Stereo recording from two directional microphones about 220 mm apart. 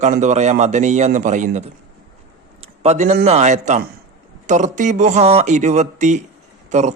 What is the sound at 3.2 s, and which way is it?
A man's voice, 30° right (ahead or behind).